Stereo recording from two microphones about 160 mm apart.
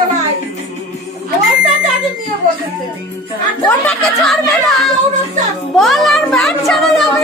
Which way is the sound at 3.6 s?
5° left (ahead or behind).